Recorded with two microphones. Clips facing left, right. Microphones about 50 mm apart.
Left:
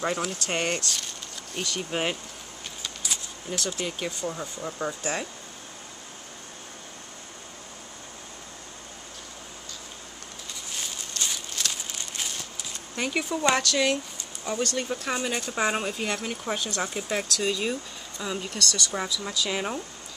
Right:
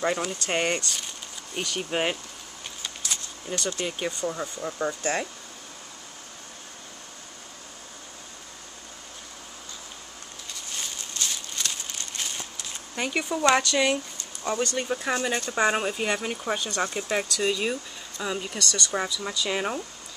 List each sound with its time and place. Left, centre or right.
0.0 s speech: centre
3.4 s speech: centre
4.1 s speech: centre
10.7 s walk: centre
11.6 s a sound: centre
12.9 s speech: centre